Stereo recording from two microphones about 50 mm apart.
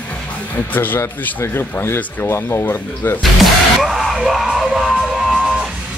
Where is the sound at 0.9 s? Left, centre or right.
Left.